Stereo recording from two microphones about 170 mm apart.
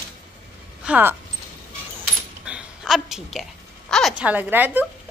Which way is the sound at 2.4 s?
5° right (ahead or behind).